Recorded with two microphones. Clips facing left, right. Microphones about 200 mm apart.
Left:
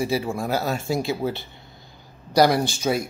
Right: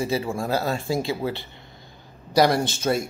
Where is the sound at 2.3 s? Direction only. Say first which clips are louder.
Left 1 dB; centre (ahead or behind).